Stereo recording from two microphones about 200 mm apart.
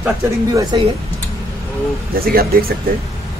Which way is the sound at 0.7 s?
25° right (ahead or behind).